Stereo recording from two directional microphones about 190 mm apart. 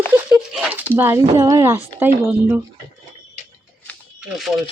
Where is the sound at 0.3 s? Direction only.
5° right (ahead or behind).